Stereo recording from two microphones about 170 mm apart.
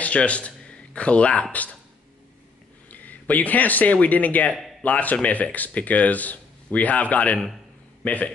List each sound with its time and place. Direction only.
0.0 s speech: 5° left (ahead or behind)
2.9 s a man's voice: 10° left (ahead or behind)